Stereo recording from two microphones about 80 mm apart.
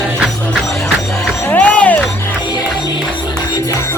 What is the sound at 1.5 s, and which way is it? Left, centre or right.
Music, centre.